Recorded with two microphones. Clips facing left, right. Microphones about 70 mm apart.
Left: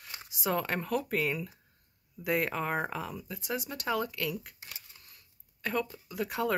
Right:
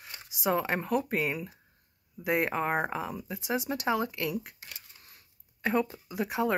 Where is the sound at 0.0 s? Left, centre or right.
Centre.